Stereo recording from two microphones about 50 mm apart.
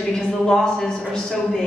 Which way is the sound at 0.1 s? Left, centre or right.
Centre.